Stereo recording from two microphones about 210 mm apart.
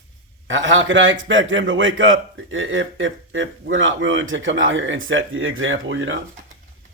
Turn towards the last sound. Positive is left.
turn(degrees=-70)  # may be behind; listen again after turning